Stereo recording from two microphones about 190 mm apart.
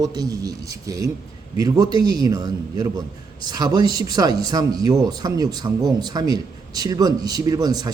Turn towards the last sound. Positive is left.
turn(degrees=-20)  # may be behind; listen again after turning